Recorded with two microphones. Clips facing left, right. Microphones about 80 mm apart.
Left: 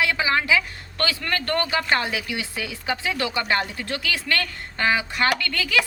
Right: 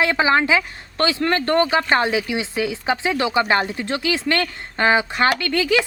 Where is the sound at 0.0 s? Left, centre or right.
Right.